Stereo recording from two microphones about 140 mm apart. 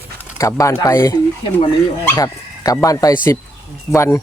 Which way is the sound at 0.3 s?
25° left (ahead or behind).